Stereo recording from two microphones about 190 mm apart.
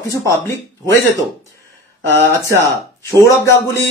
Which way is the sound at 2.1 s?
10° left (ahead or behind).